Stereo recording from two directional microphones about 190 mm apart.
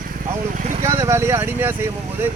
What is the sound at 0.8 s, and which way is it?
A man's voice, 15° right (ahead or behind).